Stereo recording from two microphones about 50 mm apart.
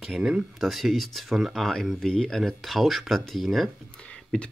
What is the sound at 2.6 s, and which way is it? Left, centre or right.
Speech, centre.